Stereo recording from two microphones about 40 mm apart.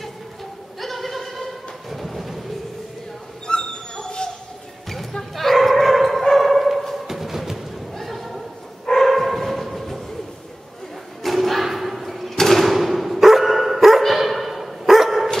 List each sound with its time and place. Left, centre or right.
0.7 s thunder: centre
3.4 s dog: left
4.8 s bow-wow: centre
6.2 s dog: centre
7.1 s music: centre
8.0 s a sound: centre
8.8 s dog: centre
11.2 s thump: centre
12.6 s dog: centre